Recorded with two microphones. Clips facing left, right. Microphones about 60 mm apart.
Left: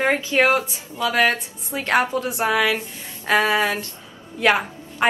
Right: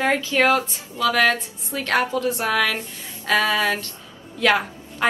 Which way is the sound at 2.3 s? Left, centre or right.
Centre.